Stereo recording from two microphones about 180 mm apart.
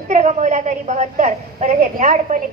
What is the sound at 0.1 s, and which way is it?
A woman's voice, 40° right (ahead or behind).